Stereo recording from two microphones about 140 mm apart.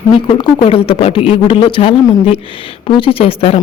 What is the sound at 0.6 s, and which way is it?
Speech, 40° left (ahead or behind).